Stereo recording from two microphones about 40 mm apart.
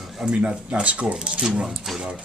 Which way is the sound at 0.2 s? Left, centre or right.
Right.